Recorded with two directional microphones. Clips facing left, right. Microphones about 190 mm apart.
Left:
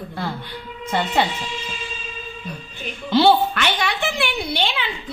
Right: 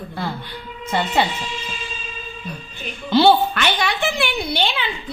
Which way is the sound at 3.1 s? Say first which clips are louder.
Right 1 dB; 35° right (ahead or behind).